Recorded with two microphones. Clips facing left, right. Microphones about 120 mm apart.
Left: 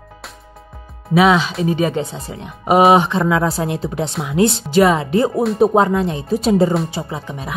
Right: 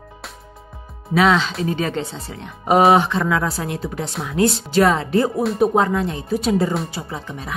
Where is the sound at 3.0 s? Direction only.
20° left (ahead or behind).